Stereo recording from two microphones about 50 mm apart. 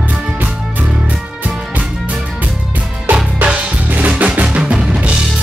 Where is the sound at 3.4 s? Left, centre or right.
Right.